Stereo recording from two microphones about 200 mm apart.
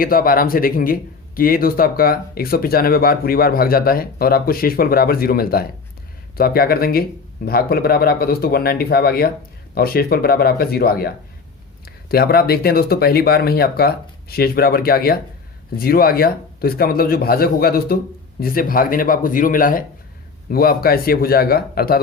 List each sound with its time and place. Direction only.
0.0 s speech: 45° left (ahead or behind)